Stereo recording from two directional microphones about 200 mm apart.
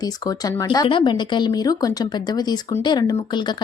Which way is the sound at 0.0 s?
20° left (ahead or behind).